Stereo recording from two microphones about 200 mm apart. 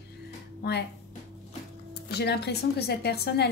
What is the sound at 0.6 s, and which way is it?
Speech, 55° left (ahead or behind).